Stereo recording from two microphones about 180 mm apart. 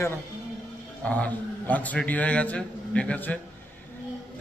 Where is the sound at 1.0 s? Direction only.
10° left (ahead or behind).